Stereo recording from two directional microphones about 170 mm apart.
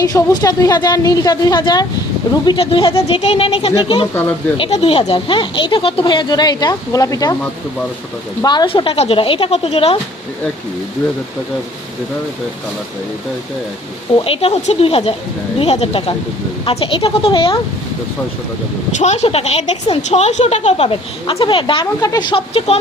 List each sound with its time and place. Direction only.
0.0 s speech: 20° left (ahead or behind)
4.1 s speech: 10° left (ahead or behind)
4.5 s speech: 35° left (ahead or behind)
8.4 s speech: 25° left (ahead or behind)
14.3 s speech: 40° left (ahead or behind)
18.9 s speech: 40° left (ahead or behind)